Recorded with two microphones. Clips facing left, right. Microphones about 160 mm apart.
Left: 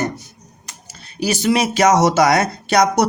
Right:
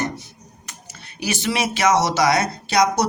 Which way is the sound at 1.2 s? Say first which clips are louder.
Left 6 dB; 40° left (ahead or behind).